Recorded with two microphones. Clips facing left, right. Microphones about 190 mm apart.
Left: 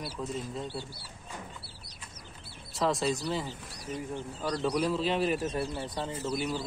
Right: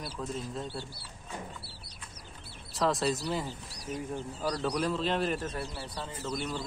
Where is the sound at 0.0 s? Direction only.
Centre (ahead or behind).